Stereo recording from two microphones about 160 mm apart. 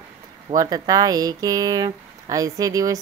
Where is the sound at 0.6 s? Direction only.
25° right (ahead or behind).